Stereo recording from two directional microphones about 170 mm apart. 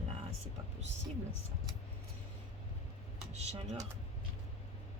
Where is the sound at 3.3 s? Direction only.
40° right (ahead or behind).